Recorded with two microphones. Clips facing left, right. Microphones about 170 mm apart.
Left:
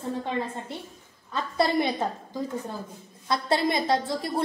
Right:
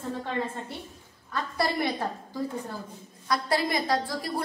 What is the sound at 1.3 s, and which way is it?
Speech, 20° left (ahead or behind).